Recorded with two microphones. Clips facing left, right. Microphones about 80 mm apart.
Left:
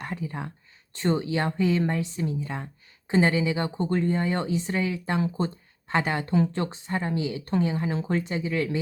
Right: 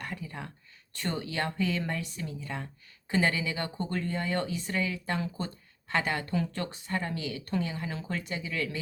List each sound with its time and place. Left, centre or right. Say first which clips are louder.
0.0 s speech: left 6 dB; left